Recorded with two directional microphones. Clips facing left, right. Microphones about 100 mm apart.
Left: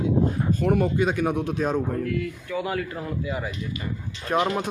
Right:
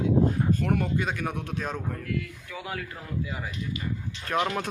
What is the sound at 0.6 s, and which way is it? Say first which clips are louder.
Speech: left 5 dB; 15° left (ahead or behind).